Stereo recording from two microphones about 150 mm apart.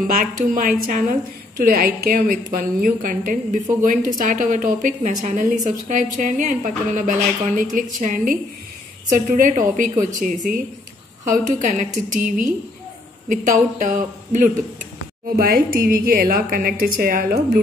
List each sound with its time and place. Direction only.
0.6 s a woman's voice: 65° right (ahead or behind)
15.3 s a woman's voice: 80° right; by 17.6 s 65° right (ahead or behind)